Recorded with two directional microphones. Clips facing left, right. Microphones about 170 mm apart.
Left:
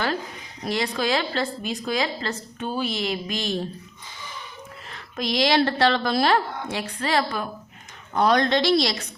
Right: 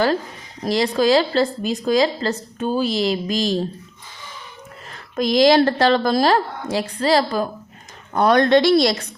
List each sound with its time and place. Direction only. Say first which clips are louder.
0.6 s a woman's voice: right 7 dB; 35° right (ahead or behind)
4.9 s a woman's voice: right 7 dB; 45° right (ahead or behind)
8.1 s a woman's voice: right 5 dB; 55° right (ahead or behind)